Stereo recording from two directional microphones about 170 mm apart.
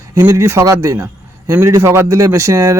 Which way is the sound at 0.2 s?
15° right (ahead or behind).